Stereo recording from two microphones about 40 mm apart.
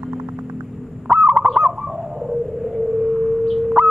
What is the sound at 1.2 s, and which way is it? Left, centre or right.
Owl, right.